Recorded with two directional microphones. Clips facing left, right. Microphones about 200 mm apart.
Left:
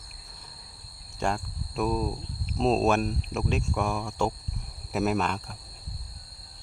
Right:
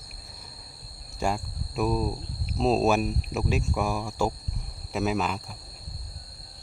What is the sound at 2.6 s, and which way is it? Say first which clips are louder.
Speech: right 1 dB; 5° right (ahead or behind).